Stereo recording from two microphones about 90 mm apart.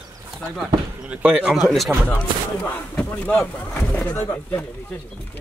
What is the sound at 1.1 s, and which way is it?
Speech, 15° right (ahead or behind).